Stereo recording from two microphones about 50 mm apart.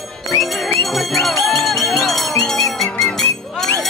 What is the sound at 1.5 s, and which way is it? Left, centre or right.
Music, centre.